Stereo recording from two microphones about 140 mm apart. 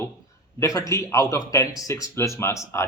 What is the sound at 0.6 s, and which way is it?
Speech, 25° left (ahead or behind).